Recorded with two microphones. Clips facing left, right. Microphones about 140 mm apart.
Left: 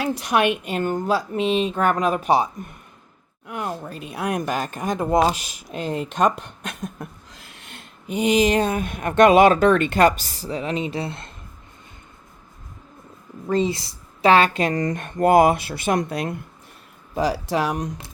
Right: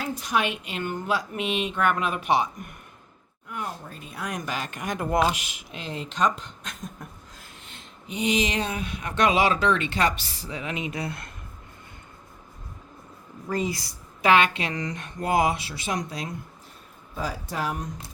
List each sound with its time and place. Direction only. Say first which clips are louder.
0.0 s speech: left 6 dB; 70° left (ahead or behind); by 2.6 s 35° left (ahead or behind)
3.4 s speech: left 6 dB; 85° left; by 4.8 s 45° left (ahead or behind)
4.8 s speech: left 5 dB; 25° left (ahead or behind)
5.2 s speech: left 4 dB; 35° left (ahead or behind)
13.5 s speech: left 6 dB; 25° left (ahead or behind); by 16.3 s 60° left (ahead or behind)
17.2 s speech: left 9 dB; 85° left